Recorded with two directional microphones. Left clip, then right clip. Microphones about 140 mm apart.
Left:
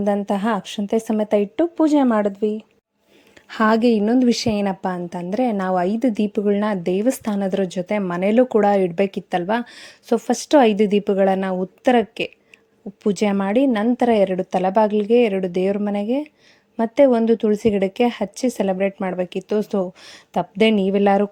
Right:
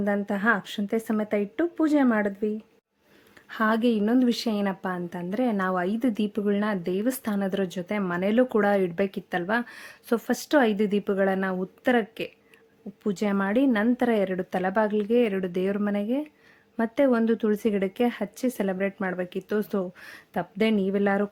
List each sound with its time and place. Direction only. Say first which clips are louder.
0.0 s a woman's voice: left 5 dB; 35° left (ahead or behind)
3.5 s a woman's voice: left 7 dB; 50° left (ahead or behind)